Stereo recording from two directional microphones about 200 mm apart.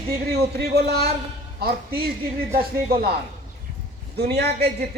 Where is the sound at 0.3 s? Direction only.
50° right (ahead or behind).